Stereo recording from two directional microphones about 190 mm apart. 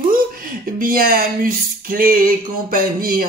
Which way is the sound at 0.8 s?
50° right (ahead or behind).